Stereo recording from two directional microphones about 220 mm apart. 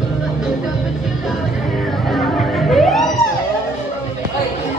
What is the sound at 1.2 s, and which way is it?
Music, centre (ahead or behind).